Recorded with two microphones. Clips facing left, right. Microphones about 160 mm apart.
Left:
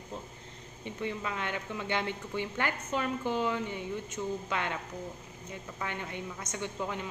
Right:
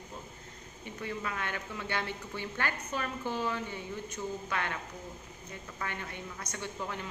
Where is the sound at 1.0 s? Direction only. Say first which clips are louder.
Left 2 dB; 20° left (ahead or behind).